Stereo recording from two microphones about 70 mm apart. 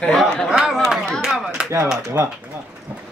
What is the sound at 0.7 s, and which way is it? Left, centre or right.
Chatter, centre.